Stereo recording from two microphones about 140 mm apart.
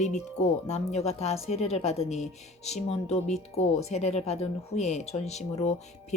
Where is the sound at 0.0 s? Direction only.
55° left (ahead or behind).